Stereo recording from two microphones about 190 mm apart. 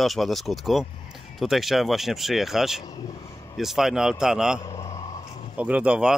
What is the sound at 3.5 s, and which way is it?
Speech, centre (ahead or behind).